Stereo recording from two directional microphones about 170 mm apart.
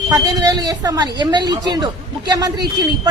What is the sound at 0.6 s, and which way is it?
Speech, 20° right (ahead or behind).